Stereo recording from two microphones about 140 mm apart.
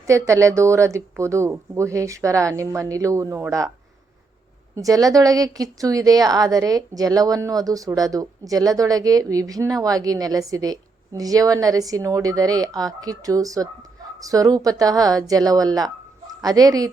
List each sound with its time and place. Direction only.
0.1 s speech: 20° right (ahead or behind)
4.7 s speech: 25° right (ahead or behind)